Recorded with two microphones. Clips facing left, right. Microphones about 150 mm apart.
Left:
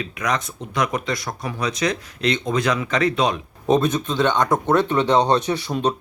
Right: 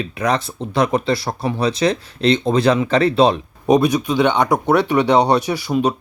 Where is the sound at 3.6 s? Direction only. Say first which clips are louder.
Right 4 dB; 15° right (ahead or behind).